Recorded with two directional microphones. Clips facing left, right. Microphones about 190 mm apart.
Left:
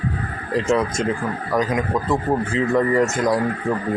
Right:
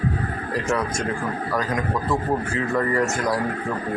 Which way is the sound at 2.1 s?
20° left (ahead or behind).